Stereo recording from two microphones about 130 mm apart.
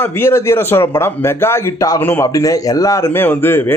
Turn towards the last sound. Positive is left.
turn(degrees=15)  # may be behind; listen again after turning